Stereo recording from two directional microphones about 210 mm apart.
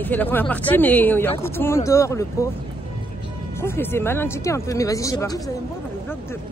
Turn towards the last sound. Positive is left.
turn(degrees=15)  # may be behind; listen again after turning